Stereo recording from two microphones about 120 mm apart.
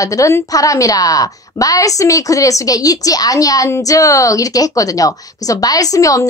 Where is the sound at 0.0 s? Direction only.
25° left (ahead or behind).